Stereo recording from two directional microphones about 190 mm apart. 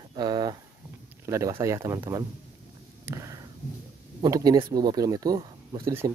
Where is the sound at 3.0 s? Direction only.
15° right (ahead or behind).